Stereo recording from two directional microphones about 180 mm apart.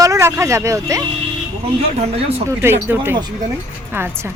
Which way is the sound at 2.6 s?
15° right (ahead or behind).